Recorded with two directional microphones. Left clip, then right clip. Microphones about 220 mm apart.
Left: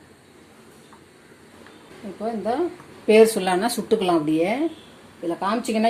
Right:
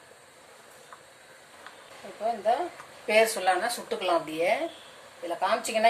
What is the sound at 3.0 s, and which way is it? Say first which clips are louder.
Speech: left 7 dB; 35° left (ahead or behind).